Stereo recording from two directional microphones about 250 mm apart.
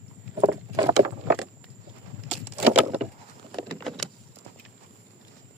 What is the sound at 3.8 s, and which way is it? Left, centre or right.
Vehicle, centre.